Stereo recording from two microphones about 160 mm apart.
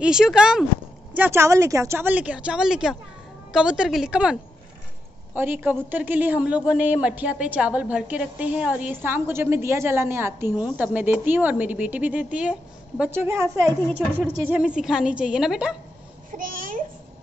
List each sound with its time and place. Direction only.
0.0 s a woman's voice: 5° right (ahead or behind)
1.1 s a woman's voice: 15° right (ahead or behind)
16.3 s a child's voice: 60° right (ahead or behind)